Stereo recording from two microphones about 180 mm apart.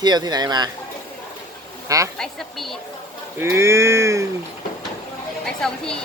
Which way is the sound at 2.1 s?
Centre (ahead or behind).